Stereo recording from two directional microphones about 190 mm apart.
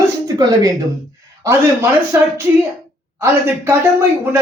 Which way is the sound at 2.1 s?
15° right (ahead or behind).